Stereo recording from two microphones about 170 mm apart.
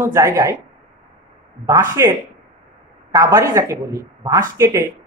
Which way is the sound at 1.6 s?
20° right (ahead or behind).